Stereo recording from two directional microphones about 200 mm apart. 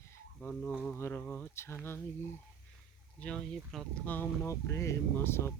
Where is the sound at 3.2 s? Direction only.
5° left (ahead or behind).